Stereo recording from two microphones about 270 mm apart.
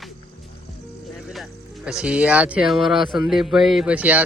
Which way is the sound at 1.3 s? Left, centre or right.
Centre.